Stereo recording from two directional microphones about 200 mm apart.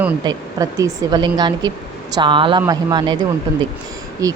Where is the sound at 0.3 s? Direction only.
15° right (ahead or behind).